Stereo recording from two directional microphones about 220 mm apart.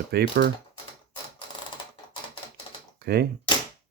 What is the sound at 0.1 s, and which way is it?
Speech, 45° right (ahead or behind).